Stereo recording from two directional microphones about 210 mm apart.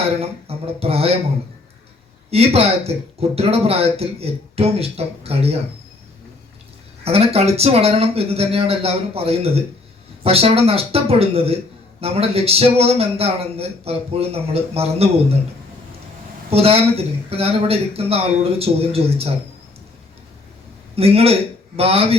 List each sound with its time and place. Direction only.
0.2 s a man's voice: 30° right (ahead or behind)
2.3 s a man's voice: 30° right (ahead or behind)
7.0 s a man's voice: 30° right (ahead or behind)
16.5 s a man's voice: 30° right (ahead or behind)
20.9 s a man's voice: 30° right (ahead or behind)